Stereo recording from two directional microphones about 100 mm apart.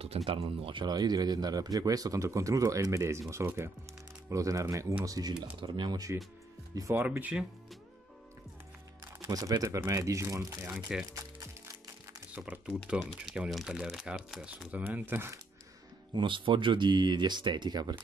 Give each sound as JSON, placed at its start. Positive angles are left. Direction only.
{"t": 0.0, "sound": "speech", "side_deg": -80}
{"t": 0.8, "sound": "speech", "side_deg": -45}
{"t": 7.1, "sound": "speech", "side_deg": -15}
{"t": 9.3, "sound": "speech", "side_deg": -35}
{"t": 10.7, "sound": "speech", "side_deg": -5}
{"t": 11.1, "sound": "music", "side_deg": -35}
{"t": 12.4, "sound": "speech", "side_deg": -10}
{"t": 16.1, "sound": "speech", "side_deg": -55}